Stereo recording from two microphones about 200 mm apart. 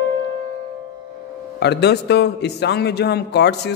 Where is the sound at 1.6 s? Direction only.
55° left (ahead or behind).